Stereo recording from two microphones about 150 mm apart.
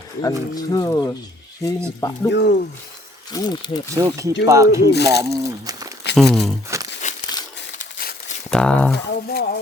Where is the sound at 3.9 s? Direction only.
20° right (ahead or behind).